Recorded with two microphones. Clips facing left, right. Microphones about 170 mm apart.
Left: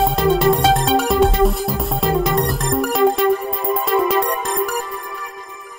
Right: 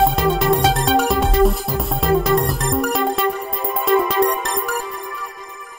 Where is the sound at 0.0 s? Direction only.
Centre (ahead or behind).